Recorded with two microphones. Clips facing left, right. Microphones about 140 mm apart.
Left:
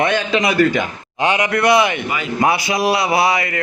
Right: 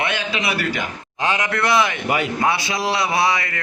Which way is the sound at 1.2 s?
25° left (ahead or behind).